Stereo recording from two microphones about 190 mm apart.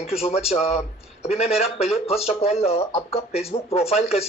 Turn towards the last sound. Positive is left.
turn(degrees=35)  # may be behind; listen again after turning